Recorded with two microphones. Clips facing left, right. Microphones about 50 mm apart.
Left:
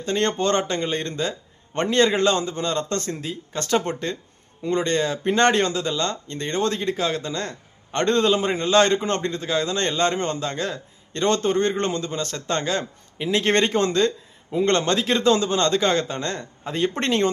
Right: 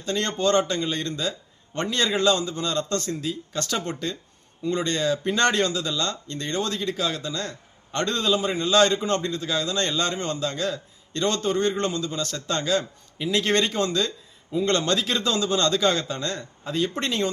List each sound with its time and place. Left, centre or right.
0.0 s a man's voice: left